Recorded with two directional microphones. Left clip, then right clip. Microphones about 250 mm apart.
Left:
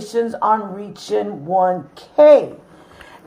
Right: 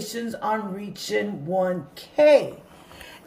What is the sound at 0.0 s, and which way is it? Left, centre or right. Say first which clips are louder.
Speech: left 11 dB; centre.